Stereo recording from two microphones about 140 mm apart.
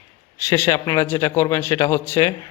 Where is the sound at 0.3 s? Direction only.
20° left (ahead or behind).